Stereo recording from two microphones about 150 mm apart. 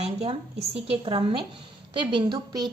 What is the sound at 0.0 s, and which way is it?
A woman's voice, 45° right (ahead or behind).